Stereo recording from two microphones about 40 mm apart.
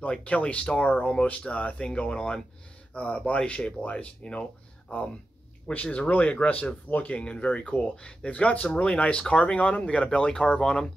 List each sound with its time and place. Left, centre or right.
0.2 s speech: left
2.0 s speech: left
8.4 s speech: left
9.1 s speech: left
10.0 s speech: centre